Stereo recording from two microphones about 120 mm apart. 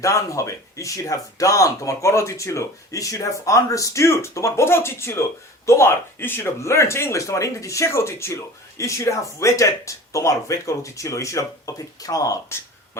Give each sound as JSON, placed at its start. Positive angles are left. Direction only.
{"t": 0.0, "sound": "speech", "side_deg": 25}